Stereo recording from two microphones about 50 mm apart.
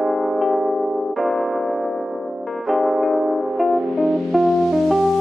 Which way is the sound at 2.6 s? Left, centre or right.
Centre.